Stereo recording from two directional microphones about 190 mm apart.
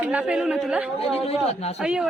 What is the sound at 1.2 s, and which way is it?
Speech, 35° left (ahead or behind).